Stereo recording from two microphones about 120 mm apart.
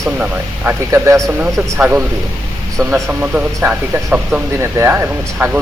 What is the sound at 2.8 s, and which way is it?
A man's voice, 15° right (ahead or behind).